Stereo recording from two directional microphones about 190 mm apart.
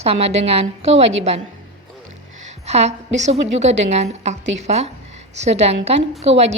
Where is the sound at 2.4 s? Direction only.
35° right (ahead or behind).